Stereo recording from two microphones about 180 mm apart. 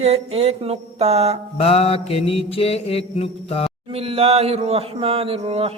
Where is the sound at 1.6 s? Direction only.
35° left (ahead or behind).